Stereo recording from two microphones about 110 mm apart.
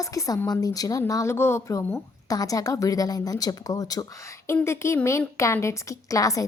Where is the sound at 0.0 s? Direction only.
30° left (ahead or behind).